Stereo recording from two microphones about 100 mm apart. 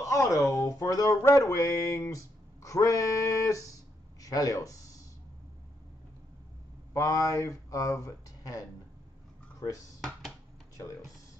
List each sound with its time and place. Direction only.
0.0 s speech: 30° left (ahead or behind)
6.9 s speech: 35° left (ahead or behind)